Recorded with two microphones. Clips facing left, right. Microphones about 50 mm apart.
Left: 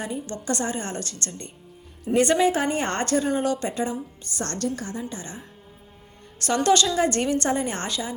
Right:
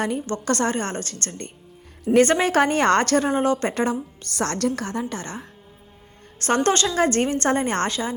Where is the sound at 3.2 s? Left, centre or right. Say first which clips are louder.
Right 3 dB; right.